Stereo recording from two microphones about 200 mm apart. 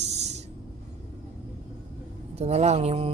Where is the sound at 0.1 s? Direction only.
35° right (ahead or behind).